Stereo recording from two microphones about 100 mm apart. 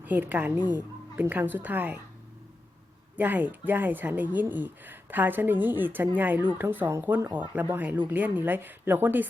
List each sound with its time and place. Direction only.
0.0 s a woman's voice: 15° right (ahead or behind)
3.2 s a woman's voice: 20° right (ahead or behind)